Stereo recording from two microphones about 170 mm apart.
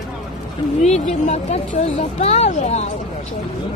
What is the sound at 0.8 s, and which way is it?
Speech, 40° left (ahead or behind).